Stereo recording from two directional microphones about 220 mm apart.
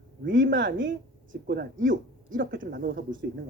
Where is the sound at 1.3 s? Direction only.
45° right (ahead or behind).